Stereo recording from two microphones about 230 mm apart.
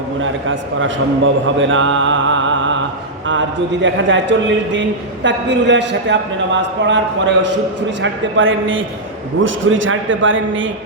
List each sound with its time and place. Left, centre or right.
0.2 s a man's voice: right
9.4 s a man's voice: right
9.7 s a man's voice: right